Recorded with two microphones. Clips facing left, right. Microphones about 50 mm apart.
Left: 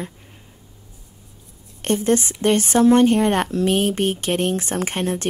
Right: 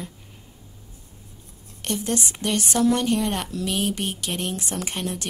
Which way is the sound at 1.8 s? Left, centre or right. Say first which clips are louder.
Left 8 dB; left.